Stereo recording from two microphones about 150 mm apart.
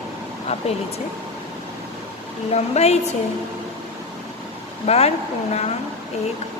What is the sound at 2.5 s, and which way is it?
Speech, 45° left (ahead or behind).